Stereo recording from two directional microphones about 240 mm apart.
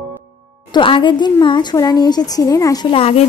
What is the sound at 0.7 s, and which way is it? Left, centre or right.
A woman's voice, left.